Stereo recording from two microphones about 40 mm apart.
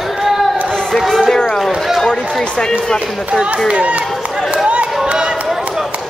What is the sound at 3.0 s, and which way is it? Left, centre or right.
Speech, right.